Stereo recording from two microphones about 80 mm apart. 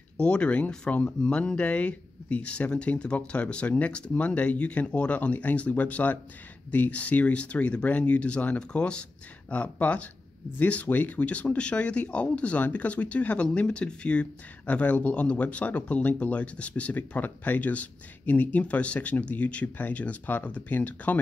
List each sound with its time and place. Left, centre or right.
0.2 s speech: centre